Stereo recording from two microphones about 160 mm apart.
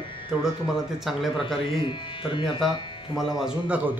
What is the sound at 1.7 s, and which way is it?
Speech, 30° left (ahead or behind).